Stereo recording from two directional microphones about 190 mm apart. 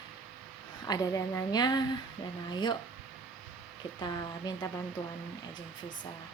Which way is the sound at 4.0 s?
20° left (ahead or behind).